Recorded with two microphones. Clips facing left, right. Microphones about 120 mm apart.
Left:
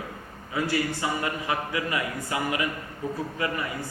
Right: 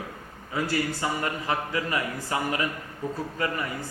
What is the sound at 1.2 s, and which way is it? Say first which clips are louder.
A man's voice: even; 35° right (ahead or behind).